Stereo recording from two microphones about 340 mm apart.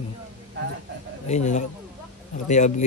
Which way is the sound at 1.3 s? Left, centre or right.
Left.